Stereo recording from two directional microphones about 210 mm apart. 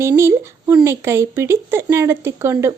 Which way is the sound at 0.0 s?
10° right (ahead or behind).